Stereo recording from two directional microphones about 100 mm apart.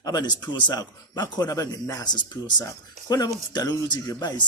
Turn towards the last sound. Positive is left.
turn(degrees=45)  # may be behind; listen again after turning